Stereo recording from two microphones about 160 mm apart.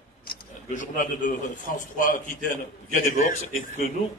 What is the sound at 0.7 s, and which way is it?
A man's voice, 55° left (ahead or behind).